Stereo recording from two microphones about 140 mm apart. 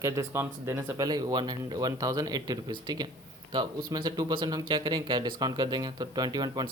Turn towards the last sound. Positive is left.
turn(degrees=-30)  # may be behind; listen again after turning